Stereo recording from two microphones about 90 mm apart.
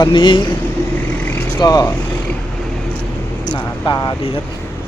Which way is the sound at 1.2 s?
20° left (ahead or behind).